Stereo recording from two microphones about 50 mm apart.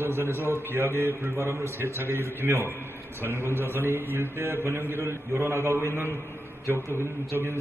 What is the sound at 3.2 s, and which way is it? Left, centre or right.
A man's voice, right.